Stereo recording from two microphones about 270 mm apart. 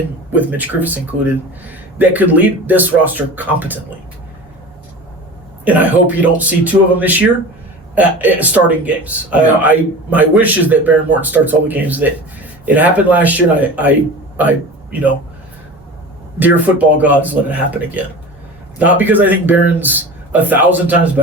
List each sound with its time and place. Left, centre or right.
0.3 s speech: centre
5.6 s speech: centre
16.4 s speech: centre